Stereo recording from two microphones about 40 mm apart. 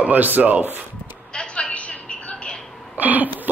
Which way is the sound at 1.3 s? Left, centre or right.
Left.